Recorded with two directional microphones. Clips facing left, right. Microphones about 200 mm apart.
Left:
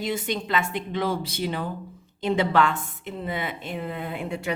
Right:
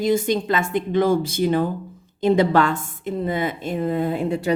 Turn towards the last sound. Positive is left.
turn(degrees=-35)  # may be behind; listen again after turning